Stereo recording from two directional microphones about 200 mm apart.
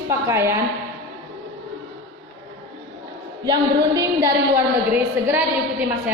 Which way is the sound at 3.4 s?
20° right (ahead or behind).